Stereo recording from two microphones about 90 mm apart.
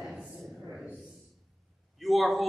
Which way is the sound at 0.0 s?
5° right (ahead or behind).